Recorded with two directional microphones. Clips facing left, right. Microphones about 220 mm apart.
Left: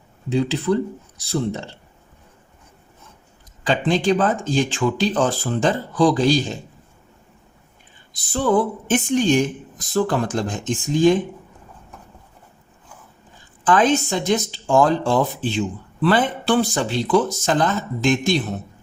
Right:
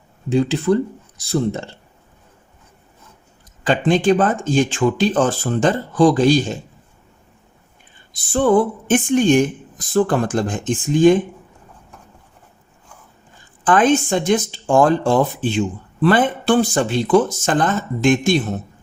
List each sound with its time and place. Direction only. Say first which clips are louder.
0.3 s speech: right 3 dB; 50° right (ahead or behind)
3.7 s speech: right 3 dB; 50° right (ahead or behind)
8.3 s speech: right 4 dB; 50° right (ahead or behind)
13.7 s speech: right 2 dB; 50° right (ahead or behind)